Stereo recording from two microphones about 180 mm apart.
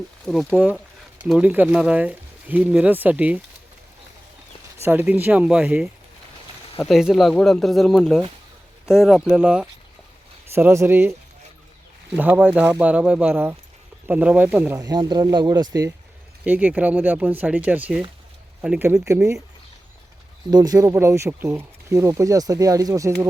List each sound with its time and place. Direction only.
0.3 s speech: 5° left (ahead or behind)
1.3 s speech: 10° right (ahead or behind)
4.8 s speech: 10° right (ahead or behind)
12.1 s speech: 10° right (ahead or behind)
14.8 s speech: 25° right (ahead or behind)
16.4 s speech: 10° right (ahead or behind)
20.5 s speech: 20° right (ahead or behind)